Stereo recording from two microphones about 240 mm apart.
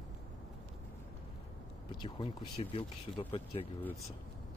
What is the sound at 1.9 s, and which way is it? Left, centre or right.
Speech, centre.